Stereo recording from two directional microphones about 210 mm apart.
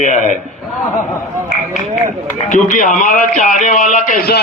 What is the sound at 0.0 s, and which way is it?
Speech, 35° left (ahead or behind).